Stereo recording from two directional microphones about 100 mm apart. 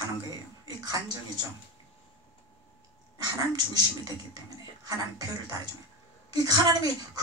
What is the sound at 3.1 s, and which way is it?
Speech, 40° right (ahead or behind).